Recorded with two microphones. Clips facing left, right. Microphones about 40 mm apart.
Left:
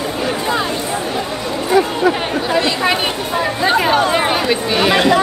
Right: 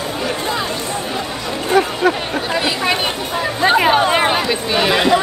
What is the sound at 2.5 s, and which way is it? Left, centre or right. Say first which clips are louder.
Speech: left 2 dB; centre.